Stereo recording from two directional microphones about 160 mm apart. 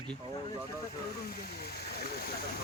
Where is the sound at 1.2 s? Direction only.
80° left.